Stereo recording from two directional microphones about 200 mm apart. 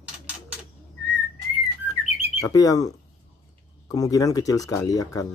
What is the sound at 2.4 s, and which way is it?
Speech, 15° left (ahead or behind).